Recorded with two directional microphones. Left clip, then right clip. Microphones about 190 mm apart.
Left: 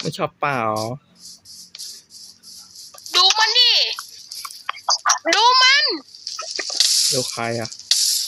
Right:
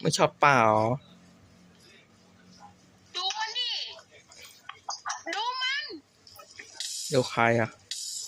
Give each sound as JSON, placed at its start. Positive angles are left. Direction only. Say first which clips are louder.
{"t": 0.0, "sound": "speech", "louder": "right 1 dB", "side_deg": 0}
{"t": 3.1, "sound": "a sound", "louder": "left 16 dB", "side_deg": 50}
{"t": 7.2, "sound": "speech", "louder": "even", "side_deg": 0}
{"t": 7.9, "sound": "ratchet", "louder": "left 19 dB", "side_deg": 45}